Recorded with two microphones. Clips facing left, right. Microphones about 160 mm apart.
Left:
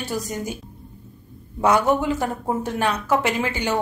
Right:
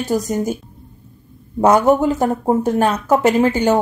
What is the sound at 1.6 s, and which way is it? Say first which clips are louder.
Speech: right 6 dB; 45° right (ahead or behind).